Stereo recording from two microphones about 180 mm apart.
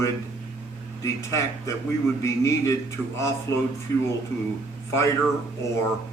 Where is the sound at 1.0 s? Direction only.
15° left (ahead or behind).